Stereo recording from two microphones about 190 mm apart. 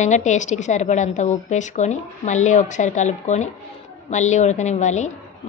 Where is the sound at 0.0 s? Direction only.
40° left (ahead or behind).